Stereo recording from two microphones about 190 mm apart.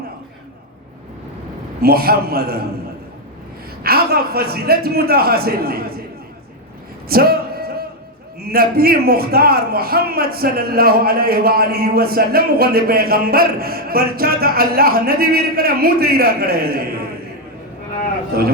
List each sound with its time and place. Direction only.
1.8 s a man's voice: 55° right (ahead or behind)
3.8 s a man's voice: 55° right (ahead or behind)
7.1 s a sound: 55° right (ahead or behind)
8.4 s a man's voice: 55° right (ahead or behind)
18.3 s a man's voice: 55° right (ahead or behind)